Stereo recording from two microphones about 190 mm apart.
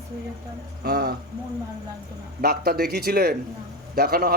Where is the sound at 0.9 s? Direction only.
55° right (ahead or behind).